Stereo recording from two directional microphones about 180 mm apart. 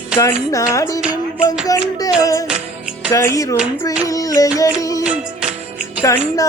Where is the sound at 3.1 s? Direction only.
15° left (ahead or behind).